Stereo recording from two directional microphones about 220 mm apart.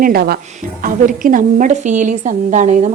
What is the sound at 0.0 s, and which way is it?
A woman's voice, 40° right (ahead or behind).